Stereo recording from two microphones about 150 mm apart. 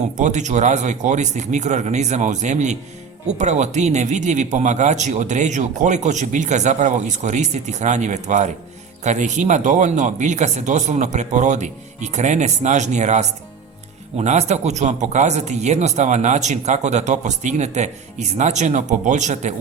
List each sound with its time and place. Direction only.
0.2 s speech: 50° right (ahead or behind)